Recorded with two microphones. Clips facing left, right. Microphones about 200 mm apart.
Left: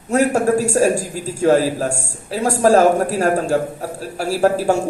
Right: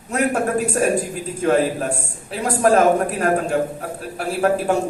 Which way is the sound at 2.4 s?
30° left (ahead or behind).